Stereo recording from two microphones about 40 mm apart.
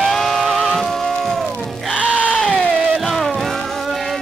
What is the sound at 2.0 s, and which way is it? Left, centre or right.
Sheep, right.